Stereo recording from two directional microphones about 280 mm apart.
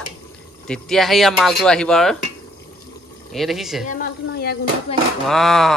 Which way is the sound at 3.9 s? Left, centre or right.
Left.